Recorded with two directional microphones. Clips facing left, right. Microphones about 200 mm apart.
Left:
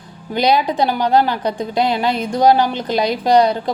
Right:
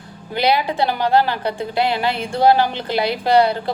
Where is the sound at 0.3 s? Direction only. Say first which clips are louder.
Left 2 dB; 15° left (ahead or behind).